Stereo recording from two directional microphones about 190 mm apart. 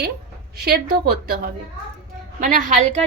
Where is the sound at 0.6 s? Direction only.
55° right (ahead or behind).